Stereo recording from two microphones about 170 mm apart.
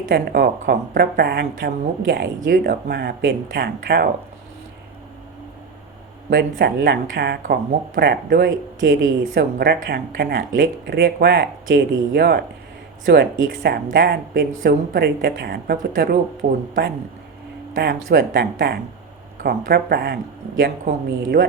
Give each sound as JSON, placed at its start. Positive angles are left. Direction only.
{"t": 0.1, "sound": "speech", "side_deg": -65}
{"t": 6.3, "sound": "speech", "side_deg": -70}
{"t": 17.7, "sound": "speech", "side_deg": -70}